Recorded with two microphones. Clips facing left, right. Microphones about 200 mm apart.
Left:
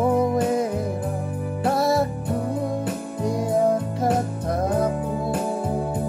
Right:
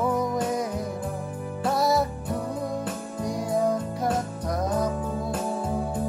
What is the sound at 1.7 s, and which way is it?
Music, 25° left (ahead or behind).